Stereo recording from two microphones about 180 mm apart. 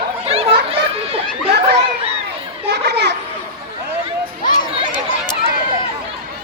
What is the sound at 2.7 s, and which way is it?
Children playing, 65° right (ahead or behind).